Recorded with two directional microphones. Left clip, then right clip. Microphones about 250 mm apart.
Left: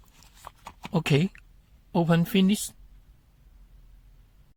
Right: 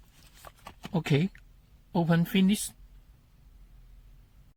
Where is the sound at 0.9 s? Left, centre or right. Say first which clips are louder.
Left 4 dB; left.